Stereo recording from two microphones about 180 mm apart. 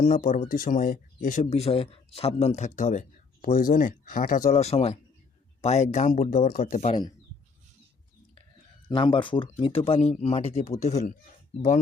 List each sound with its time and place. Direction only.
0.0 s speech: 45° left (ahead or behind)
8.9 s speech: 25° left (ahead or behind)